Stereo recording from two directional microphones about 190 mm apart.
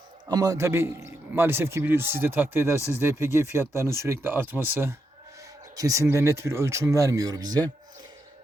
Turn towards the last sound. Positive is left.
turn(degrees=-20)  # may be behind; listen again after turning